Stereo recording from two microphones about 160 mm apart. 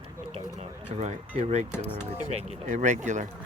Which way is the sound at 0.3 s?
40° right (ahead or behind).